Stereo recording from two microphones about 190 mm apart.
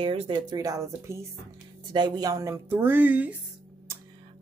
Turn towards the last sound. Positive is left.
turn(degrees=-10)  # may be behind; listen again after turning